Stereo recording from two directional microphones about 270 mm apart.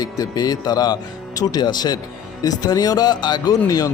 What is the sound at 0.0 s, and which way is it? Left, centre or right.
Speech, centre.